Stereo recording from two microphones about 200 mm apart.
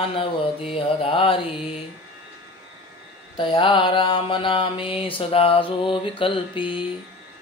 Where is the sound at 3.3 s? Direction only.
25° left (ahead or behind).